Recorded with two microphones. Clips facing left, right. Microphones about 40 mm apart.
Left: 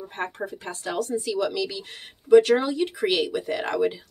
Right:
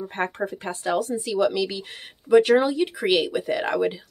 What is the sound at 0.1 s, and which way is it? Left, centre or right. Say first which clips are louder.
Speech: right 3 dB; right.